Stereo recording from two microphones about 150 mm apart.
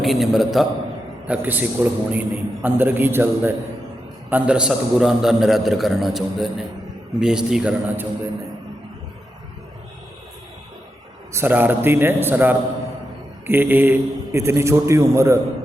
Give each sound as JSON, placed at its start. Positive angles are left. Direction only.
{"t": 0.0, "sound": "a man's voice", "side_deg": 0}
{"t": 11.3, "sound": "a man's voice", "side_deg": -15}